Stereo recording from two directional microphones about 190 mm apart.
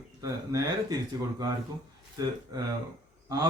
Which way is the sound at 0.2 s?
15° right (ahead or behind).